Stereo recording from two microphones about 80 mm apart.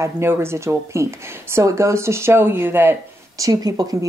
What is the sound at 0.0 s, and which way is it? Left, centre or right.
Speech, right.